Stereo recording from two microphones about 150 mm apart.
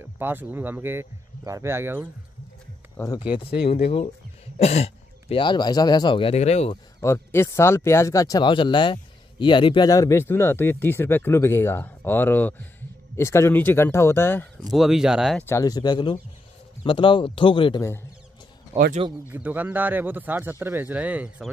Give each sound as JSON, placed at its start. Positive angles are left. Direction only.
{"t": 0.0, "sound": "speech", "side_deg": -15}
{"t": 3.2, "sound": "speech", "side_deg": 35}
{"t": 7.0, "sound": "speech", "side_deg": 15}
{"t": 14.7, "sound": "speech", "side_deg": 0}
{"t": 15.3, "sound": "speech", "side_deg": 15}
{"t": 19.2, "sound": "speech", "side_deg": -10}